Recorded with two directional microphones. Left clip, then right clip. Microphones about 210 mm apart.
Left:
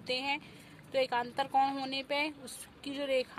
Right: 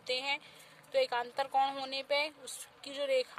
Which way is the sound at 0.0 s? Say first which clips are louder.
Left 1 dB; 15° right (ahead or behind).